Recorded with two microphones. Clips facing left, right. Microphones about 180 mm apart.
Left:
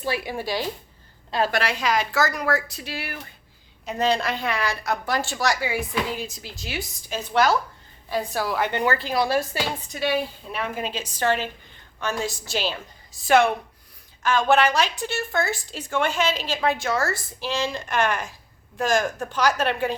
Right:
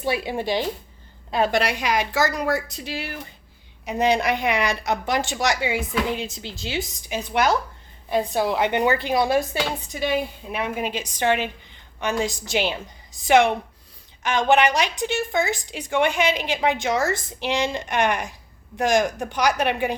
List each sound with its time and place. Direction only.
0.0 s a woman's voice: 20° right (ahead or behind)
7.1 s a woman's voice: 15° right (ahead or behind)